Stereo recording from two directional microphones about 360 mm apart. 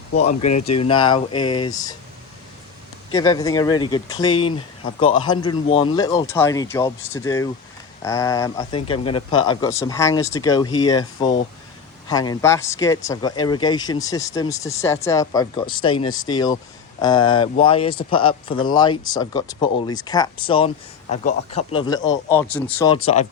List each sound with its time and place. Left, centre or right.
0.2 s speech: centre
3.1 s speech: centre